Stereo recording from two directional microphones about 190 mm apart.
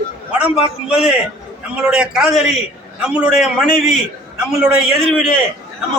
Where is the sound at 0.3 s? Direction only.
5° right (ahead or behind).